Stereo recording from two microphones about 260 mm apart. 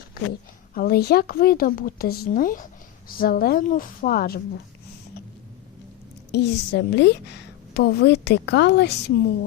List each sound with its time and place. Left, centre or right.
0.7 s a woman's voice: left
6.3 s a woman's voice: left